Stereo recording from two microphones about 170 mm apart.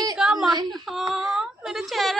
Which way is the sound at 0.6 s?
25° right (ahead or behind).